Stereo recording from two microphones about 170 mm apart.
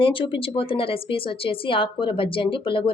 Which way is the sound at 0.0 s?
30° left (ahead or behind).